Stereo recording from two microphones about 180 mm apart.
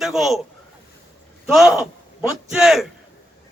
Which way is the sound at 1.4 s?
Centre (ahead or behind).